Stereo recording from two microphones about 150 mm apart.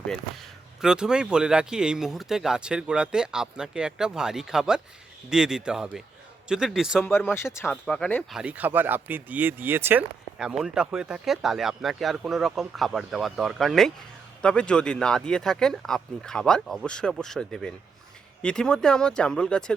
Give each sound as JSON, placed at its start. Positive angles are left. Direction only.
{"t": 0.8, "sound": "speech", "side_deg": -5}
{"t": 7.0, "sound": "speech", "side_deg": 15}
{"t": 7.9, "sound": "speech", "side_deg": 5}